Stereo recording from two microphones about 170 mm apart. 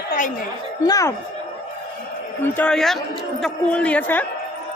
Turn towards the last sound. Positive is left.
turn(degrees=10)  # may be behind; listen again after turning